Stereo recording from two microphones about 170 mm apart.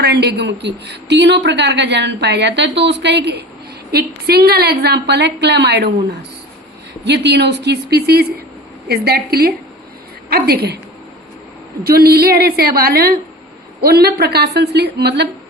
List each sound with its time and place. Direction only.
0.0 s speech: 75° right (ahead or behind)
3.9 s a woman's voice: 70° right (ahead or behind)
7.0 s a woman's voice: 90° right; by 10.8 s 70° right (ahead or behind)
11.9 s a woman's voice: 65° right (ahead or behind)